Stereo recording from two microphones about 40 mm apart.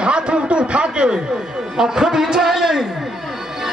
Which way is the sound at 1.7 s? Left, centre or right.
Centre.